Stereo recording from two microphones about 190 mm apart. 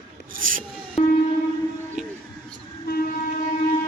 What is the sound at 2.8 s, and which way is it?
Train, 55° left (ahead or behind).